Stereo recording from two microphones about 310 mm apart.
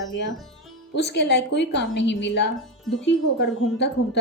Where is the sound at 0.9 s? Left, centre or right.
Left.